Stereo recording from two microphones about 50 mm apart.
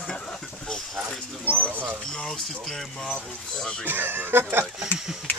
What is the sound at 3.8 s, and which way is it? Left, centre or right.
Speech, right.